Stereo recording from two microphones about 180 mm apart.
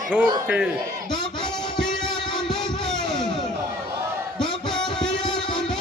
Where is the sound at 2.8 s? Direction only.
Centre (ahead or behind).